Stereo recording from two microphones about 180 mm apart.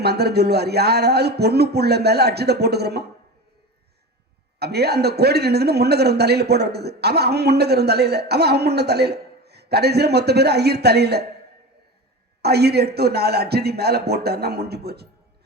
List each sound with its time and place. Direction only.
0.0 s a man's voice: 65° right (ahead or behind)
4.6 s a man's voice: 65° right (ahead or behind)
12.4 s a man's voice: 65° right (ahead or behind)